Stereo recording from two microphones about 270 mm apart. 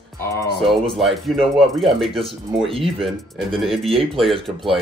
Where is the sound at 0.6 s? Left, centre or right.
Centre.